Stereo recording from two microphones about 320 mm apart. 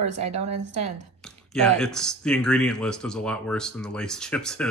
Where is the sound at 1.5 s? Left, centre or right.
Centre.